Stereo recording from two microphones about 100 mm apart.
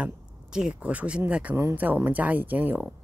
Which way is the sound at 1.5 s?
20° right (ahead or behind).